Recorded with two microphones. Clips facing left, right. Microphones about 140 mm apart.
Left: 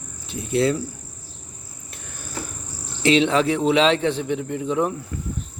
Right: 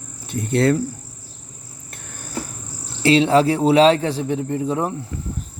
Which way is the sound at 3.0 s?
35° right (ahead or behind).